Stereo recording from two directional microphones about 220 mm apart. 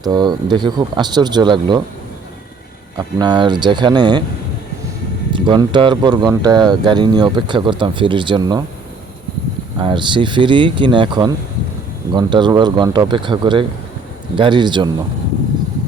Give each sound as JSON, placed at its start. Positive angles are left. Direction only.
{"t": 0.0, "sound": "speech", "side_deg": -20}
{"t": 3.2, "sound": "speech", "side_deg": -20}
{"t": 5.3, "sound": "speech", "side_deg": -20}
{"t": 9.7, "sound": "speech", "side_deg": -20}